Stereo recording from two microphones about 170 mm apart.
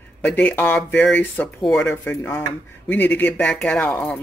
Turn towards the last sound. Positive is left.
turn(degrees=5)  # may be behind; listen again after turning